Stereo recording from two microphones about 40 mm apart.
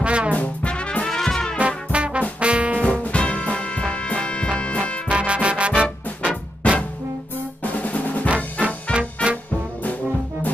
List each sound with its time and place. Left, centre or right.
0.0 s brass instrument: right
0.7 s brass instrument: left
1.0 s music: centre
1.9 s trombone: right
2.8 s music: left
5.0 s music: right
6.6 s music: left
7.6 s drum: left
8.9 s music: right